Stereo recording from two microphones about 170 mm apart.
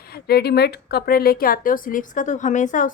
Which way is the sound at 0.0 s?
65° left (ahead or behind).